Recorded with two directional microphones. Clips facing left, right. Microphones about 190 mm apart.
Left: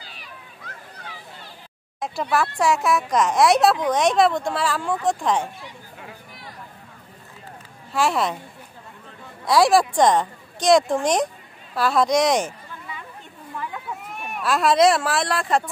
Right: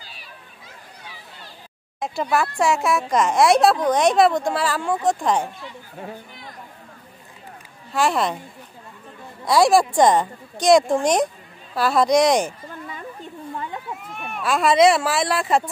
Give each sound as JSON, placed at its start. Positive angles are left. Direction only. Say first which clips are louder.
{"t": 2.0, "sound": "speech", "louder": "right 1 dB", "side_deg": 0}
{"t": 7.9, "sound": "speech", "louder": "right 1 dB", "side_deg": 0}
{"t": 9.5, "sound": "speech", "louder": "right 1 dB", "side_deg": 0}
{"t": 12.4, "sound": "a sound", "louder": "right 3 dB", "side_deg": -45}
{"t": 14.3, "sound": "speech", "louder": "right 1 dB", "side_deg": 0}